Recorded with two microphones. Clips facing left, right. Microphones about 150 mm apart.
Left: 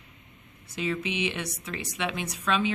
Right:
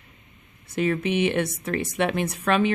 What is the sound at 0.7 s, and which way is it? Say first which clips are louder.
Speech: right 7 dB; 55° right (ahead or behind).